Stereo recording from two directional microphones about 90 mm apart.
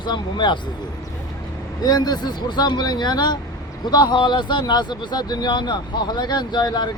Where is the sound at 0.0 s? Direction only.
60° left (ahead or behind).